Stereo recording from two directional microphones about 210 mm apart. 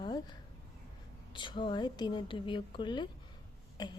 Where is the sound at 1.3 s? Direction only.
20° left (ahead or behind).